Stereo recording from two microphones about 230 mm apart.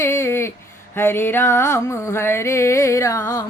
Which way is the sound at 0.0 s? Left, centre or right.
Centre.